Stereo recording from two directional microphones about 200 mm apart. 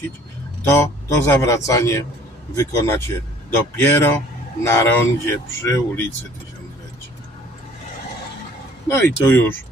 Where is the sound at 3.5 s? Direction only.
10° left (ahead or behind).